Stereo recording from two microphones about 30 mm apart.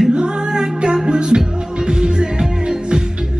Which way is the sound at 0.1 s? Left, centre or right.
Right.